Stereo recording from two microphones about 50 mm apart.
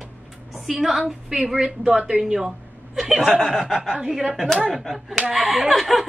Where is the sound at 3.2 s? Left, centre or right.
Centre.